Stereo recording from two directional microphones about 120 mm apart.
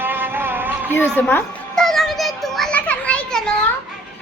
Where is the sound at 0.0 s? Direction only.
15° right (ahead or behind).